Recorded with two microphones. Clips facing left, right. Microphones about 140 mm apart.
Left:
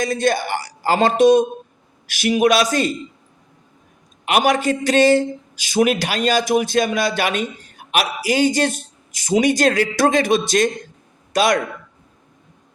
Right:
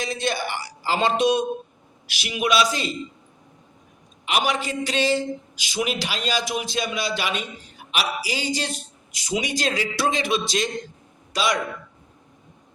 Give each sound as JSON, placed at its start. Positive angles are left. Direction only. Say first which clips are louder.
{"t": 0.0, "sound": "a man's voice", "louder": "left 7 dB", "side_deg": 45}
{"t": 4.3, "sound": "a man's voice", "louder": "left 7 dB", "side_deg": 50}